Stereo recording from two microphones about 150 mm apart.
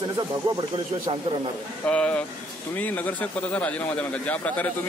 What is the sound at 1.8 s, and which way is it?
Speech, 10° left (ahead or behind).